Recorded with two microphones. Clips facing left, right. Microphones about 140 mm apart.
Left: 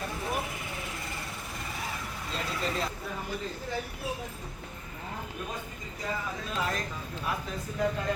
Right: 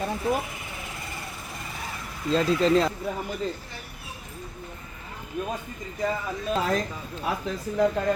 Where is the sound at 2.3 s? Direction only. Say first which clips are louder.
Right 13 dB; 90° right.